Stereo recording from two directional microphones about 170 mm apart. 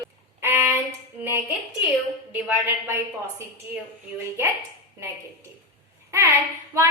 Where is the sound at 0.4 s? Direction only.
15° right (ahead or behind).